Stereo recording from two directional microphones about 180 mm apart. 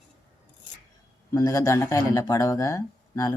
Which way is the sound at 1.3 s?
20° left (ahead or behind).